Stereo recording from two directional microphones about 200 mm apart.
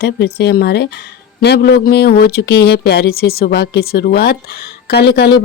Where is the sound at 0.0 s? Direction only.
55° left (ahead or behind).